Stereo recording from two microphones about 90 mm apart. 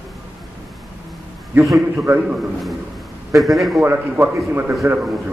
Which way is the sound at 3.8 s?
25° right (ahead or behind).